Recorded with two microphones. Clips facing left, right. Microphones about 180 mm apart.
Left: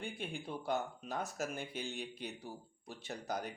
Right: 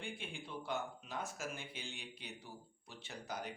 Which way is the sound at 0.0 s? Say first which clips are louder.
Left 4 dB; 40° left (ahead or behind).